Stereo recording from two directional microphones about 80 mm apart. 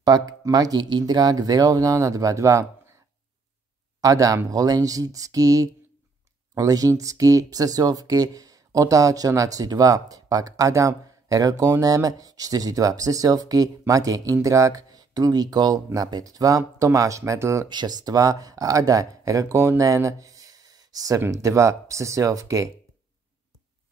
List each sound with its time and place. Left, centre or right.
0.0 s speech: right
4.0 s speech: right
17.6 s speech: right
19.8 s a sound: right
21.3 s speech: right